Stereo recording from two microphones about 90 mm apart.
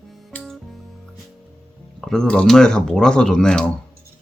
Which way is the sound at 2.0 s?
5° left (ahead or behind).